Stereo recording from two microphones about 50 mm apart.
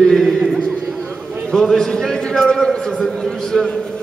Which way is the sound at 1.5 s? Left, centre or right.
Centre.